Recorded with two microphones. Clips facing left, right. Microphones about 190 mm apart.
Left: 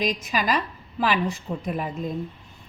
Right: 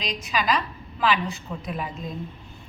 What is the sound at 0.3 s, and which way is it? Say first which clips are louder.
A woman's voice: even; 45° left (ahead or behind).